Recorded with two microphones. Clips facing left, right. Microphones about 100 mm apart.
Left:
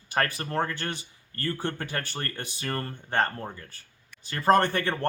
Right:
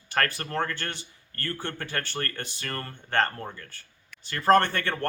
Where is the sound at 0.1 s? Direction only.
15° left (ahead or behind).